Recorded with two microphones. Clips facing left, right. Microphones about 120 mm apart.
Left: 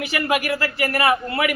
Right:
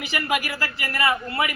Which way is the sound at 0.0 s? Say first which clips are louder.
Left 4 dB; 50° left (ahead or behind).